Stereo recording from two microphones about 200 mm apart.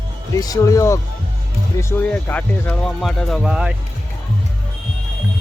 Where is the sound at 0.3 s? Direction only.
20° left (ahead or behind); by 3.8 s 5° right (ahead or behind).